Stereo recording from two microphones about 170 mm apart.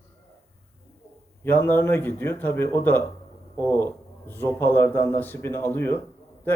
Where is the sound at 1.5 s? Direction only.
10° left (ahead or behind).